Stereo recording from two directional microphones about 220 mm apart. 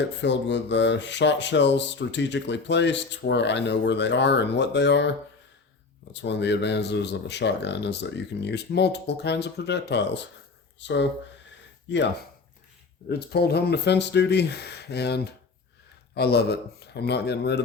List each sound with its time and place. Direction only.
0.0 s speech: 55° left (ahead or behind)
6.1 s speech: 50° left (ahead or behind)
10.8 s a sound: 55° left (ahead or behind)
13.1 s speech: 45° left (ahead or behind)